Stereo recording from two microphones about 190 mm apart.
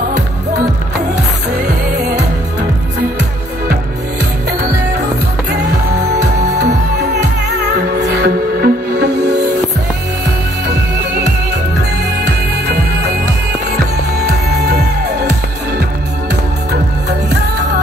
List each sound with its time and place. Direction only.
6.6 s music: 60° right (ahead or behind)